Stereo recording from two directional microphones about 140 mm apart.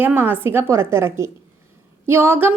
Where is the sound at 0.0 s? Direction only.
15° right (ahead or behind).